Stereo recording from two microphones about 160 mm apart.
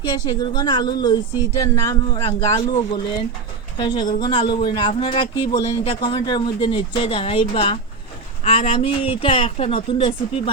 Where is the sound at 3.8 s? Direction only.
30° left (ahead or behind).